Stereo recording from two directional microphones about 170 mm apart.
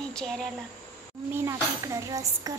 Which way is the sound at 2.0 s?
20° right (ahead or behind).